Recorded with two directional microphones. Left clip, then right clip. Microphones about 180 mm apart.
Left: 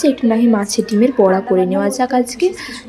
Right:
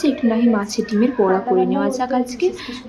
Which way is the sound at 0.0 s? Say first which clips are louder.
Left 4 dB; 25° left (ahead or behind).